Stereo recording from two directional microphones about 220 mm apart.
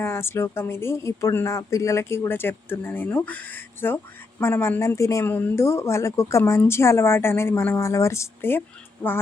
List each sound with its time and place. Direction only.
0.0 s speech: 10° left (ahead or behind)